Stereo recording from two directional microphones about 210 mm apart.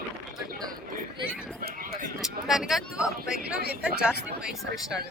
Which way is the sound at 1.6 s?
45° right (ahead or behind).